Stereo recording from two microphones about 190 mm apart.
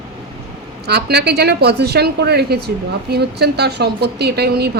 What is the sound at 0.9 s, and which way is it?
A woman's voice, 60° right (ahead or behind).